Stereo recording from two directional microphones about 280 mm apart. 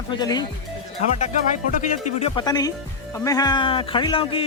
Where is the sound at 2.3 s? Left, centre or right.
Centre.